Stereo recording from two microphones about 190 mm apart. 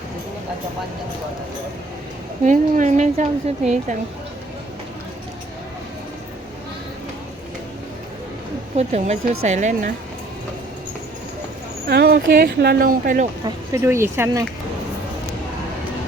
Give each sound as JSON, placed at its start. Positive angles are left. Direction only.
{"t": 2.4, "sound": "a woman's voice", "side_deg": -40}
{"t": 8.7, "sound": "a woman's voice", "side_deg": -35}
{"t": 11.9, "sound": "speech", "side_deg": -55}
{"t": 13.4, "sound": "speech", "side_deg": -15}